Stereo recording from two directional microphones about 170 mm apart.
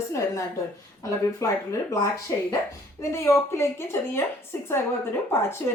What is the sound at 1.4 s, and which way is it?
Speech, 15° left (ahead or behind).